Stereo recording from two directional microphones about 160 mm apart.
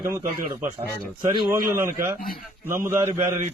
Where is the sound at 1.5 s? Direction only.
15° right (ahead or behind).